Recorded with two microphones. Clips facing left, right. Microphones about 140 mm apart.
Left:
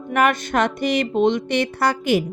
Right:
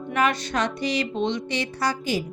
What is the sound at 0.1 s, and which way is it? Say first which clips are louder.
Speech: left 5 dB; 55° left (ahead or behind).